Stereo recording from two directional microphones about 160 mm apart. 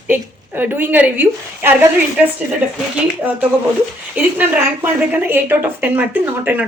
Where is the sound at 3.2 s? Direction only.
10° right (ahead or behind).